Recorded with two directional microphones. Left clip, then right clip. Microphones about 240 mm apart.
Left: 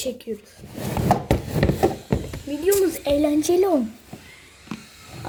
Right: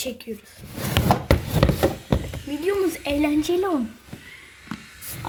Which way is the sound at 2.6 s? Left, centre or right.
Centre.